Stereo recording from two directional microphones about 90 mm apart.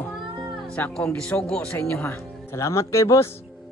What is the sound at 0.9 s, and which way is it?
A man's voice, 10° left (ahead or behind).